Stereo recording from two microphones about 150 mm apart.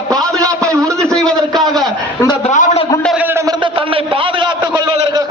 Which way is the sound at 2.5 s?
50° left (ahead or behind).